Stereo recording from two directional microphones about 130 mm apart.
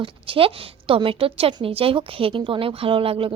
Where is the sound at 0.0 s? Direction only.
45° right (ahead or behind).